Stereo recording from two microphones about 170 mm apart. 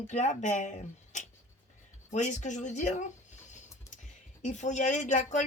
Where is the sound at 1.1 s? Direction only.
45° left (ahead or behind).